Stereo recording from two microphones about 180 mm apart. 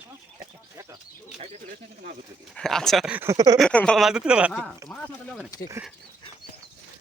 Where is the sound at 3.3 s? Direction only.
20° right (ahead or behind).